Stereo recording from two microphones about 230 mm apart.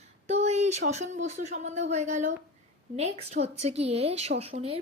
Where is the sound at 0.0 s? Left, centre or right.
Right.